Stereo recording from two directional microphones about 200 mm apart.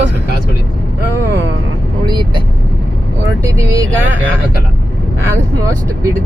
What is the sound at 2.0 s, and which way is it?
Vehicle, 20° right (ahead or behind).